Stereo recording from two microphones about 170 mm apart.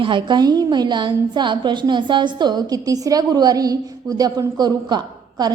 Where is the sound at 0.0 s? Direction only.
30° right (ahead or behind).